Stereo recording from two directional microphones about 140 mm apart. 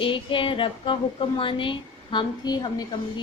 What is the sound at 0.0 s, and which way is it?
A woman's voice, 35° left (ahead or behind).